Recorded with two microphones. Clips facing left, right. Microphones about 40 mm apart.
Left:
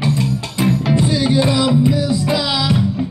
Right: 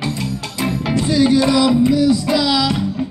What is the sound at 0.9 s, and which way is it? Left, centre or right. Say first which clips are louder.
Music: right 6 dB; left.